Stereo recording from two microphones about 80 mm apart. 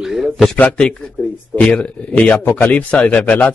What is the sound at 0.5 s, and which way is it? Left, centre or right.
A man's voice, centre.